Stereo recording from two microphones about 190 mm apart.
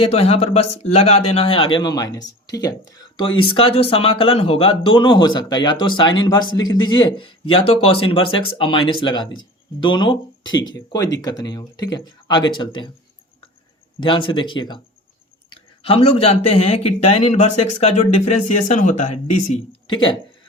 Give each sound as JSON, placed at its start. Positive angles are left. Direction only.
{"t": 0.0, "sound": "a man's voice", "side_deg": 30}
{"t": 14.0, "sound": "a man's voice", "side_deg": 25}